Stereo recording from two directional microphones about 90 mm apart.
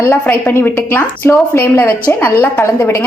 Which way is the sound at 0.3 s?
25° left (ahead or behind).